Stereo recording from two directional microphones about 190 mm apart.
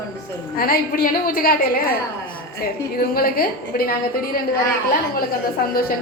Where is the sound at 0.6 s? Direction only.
50° left (ahead or behind).